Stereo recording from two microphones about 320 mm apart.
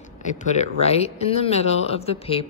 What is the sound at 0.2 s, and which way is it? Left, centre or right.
Speech, left.